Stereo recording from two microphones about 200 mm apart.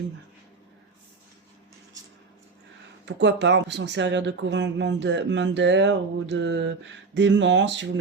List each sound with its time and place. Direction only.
3.1 s speech: 60° right (ahead or behind)